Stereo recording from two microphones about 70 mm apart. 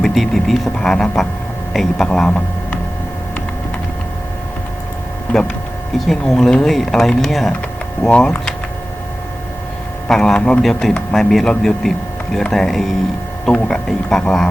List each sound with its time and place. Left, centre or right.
0.0 s speech: centre
5.3 s speech: left
6.1 s a man's voice: centre
8.1 s speech: centre
10.1 s a man's voice: centre